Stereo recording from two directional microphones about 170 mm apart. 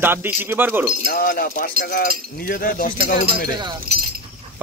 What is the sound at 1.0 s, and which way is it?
Speech, 55° left (ahead or behind).